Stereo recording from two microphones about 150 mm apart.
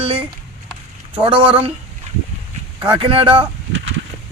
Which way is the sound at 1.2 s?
35° right (ahead or behind).